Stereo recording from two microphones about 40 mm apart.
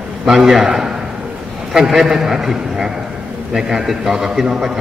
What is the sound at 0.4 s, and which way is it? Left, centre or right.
A man's voice, centre.